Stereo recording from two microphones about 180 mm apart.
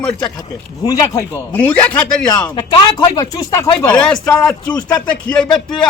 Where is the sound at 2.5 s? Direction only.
20° left (ahead or behind).